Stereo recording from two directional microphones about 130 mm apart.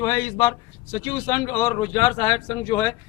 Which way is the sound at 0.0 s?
30° left (ahead or behind).